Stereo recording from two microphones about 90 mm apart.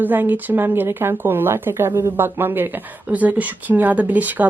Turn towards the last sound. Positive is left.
turn(degrees=-20)  # may be behind; listen again after turning